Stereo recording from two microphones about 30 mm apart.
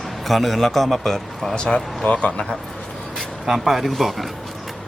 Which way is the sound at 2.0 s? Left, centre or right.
Left.